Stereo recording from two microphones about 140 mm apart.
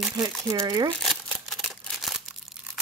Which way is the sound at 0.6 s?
30° right (ahead or behind).